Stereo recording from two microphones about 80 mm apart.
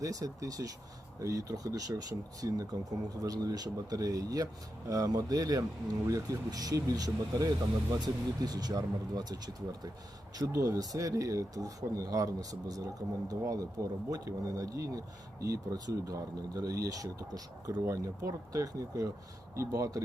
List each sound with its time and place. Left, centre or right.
0.0 s speech: right